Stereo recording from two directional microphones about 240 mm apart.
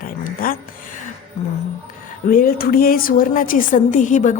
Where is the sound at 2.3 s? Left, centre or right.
Left.